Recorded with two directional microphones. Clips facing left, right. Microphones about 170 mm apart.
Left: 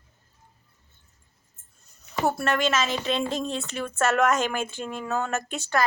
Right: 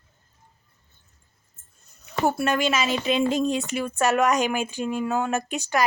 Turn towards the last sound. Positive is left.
turn(degrees=-15)  # may be behind; listen again after turning